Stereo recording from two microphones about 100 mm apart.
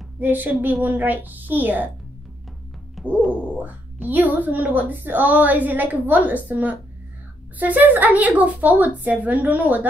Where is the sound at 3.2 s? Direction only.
15° right (ahead or behind).